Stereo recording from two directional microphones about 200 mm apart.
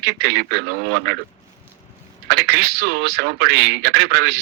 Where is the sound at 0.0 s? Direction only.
55° right (ahead or behind).